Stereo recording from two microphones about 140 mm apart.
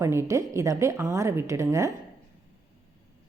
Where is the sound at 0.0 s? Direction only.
20° right (ahead or behind).